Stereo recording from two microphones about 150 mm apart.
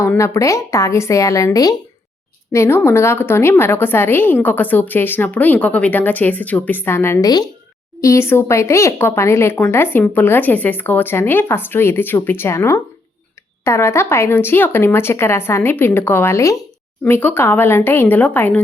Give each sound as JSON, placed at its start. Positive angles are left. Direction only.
{"t": 0.0, "sound": "a woman's voice", "side_deg": 20}